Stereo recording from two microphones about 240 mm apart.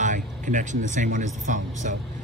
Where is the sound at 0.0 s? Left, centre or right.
Right.